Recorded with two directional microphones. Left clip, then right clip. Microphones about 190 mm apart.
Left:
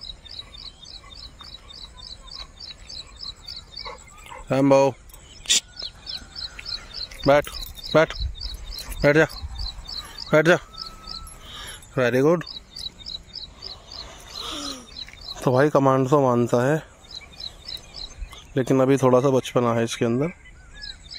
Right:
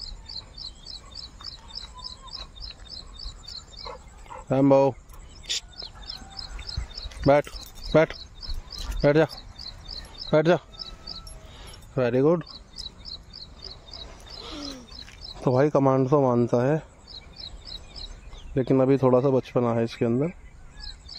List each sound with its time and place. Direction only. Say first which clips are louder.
3.8 s dog: left 2 dB; 5° left (ahead or behind)
5.5 s bird: left 9 dB; centre (ahead or behind)
6.9 s a sound: left 2 dB; 10° right (ahead or behind)
7.9 s speech: left 2 dB; 10° right (ahead or behind)
10.3 s speech: left 3 dB; 5° right (ahead or behind)
11.5 s keys jangling: left 3 dB; centre (ahead or behind)
13.8 s bird: left 3 dB; 5° right (ahead or behind)
15.4 s speech: left 3 dB; centre (ahead or behind)
18.5 s speech: left 2 dB; centre (ahead or behind)
20.8 s crow: left 4 dB; 20° right (ahead or behind)